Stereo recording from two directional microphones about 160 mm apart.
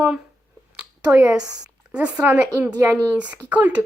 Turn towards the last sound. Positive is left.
turn(degrees=-10)  # may be behind; listen again after turning